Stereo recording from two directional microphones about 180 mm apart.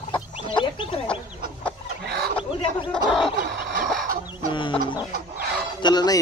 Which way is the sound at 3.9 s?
55° right (ahead or behind).